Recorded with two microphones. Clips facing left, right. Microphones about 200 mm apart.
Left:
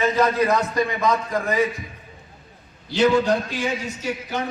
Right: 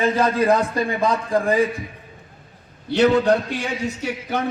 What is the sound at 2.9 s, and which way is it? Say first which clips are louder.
A man's voice: right 2 dB; 60° right (ahead or behind).